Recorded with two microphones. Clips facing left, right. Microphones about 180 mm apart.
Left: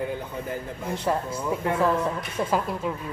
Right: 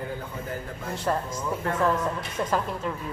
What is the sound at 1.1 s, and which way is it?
Speech, 10° left (ahead or behind).